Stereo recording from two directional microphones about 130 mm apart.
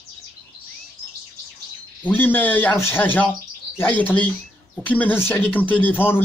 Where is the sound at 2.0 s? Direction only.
15° left (ahead or behind).